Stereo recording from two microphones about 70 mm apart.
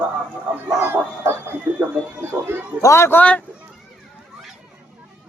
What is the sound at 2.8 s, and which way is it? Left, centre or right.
Speech, left.